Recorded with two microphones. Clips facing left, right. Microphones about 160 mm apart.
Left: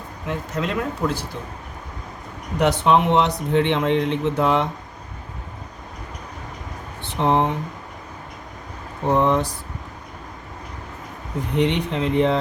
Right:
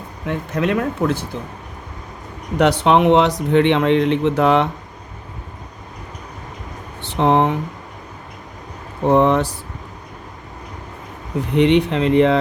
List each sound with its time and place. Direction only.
0.3 s speech: 60° right (ahead or behind)
2.6 s speech: 70° right (ahead or behind)
7.2 s speech: 70° right (ahead or behind)
9.1 s speech: 70° right (ahead or behind)
11.5 s speech: 70° right (ahead or behind)